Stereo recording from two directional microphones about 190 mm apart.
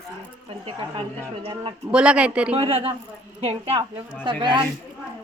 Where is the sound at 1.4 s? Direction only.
30° right (ahead or behind).